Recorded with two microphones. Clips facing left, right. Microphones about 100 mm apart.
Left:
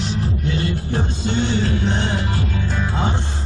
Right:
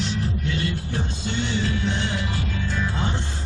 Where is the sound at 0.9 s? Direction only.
40° left (ahead or behind).